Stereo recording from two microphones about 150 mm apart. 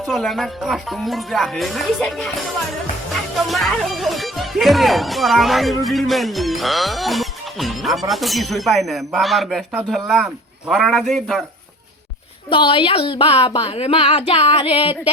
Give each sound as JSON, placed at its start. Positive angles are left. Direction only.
{"t": 0.0, "sound": "speech", "side_deg": 0}
{"t": 12.5, "sound": "speech", "side_deg": 35}